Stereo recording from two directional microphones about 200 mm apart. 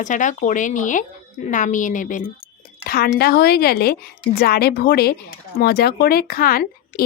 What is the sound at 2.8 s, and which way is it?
Speech, 50° left (ahead or behind).